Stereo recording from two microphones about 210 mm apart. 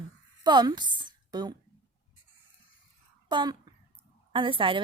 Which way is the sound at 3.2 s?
20° right (ahead or behind).